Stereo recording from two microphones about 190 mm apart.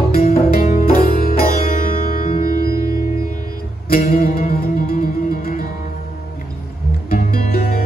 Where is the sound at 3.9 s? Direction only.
50° left (ahead or behind).